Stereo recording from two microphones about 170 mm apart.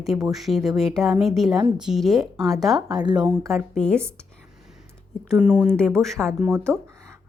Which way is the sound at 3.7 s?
5° left (ahead or behind).